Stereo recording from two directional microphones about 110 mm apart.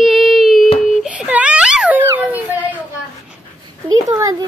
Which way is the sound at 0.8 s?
5° right (ahead or behind).